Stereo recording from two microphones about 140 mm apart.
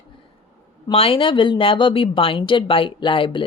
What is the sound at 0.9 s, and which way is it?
A woman's voice, 40° left (ahead or behind).